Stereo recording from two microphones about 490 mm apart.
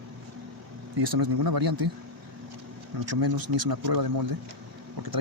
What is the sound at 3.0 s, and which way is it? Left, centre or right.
Speech, right.